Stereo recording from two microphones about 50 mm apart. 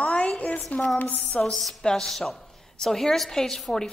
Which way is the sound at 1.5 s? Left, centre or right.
Centre.